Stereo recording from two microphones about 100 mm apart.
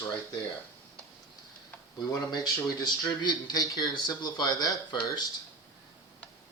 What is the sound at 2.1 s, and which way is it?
Speech, 40° left (ahead or behind).